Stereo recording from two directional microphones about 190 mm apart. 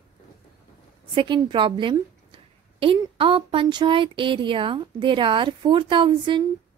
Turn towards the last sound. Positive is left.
turn(degrees=-25)  # may be behind; listen again after turning